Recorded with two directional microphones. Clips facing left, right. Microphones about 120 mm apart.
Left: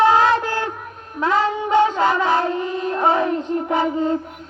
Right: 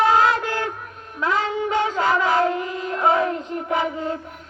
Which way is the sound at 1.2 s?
30° left (ahead or behind).